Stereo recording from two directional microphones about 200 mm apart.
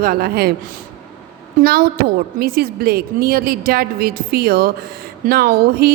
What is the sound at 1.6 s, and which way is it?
A woman's voice, 50° right (ahead or behind).